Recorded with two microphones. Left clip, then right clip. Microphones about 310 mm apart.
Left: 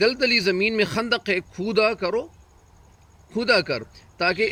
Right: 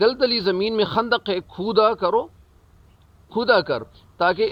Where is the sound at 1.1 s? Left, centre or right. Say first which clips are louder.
Even; centre.